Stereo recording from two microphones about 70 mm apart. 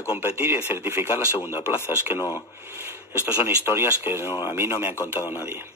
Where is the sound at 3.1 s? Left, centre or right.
Right.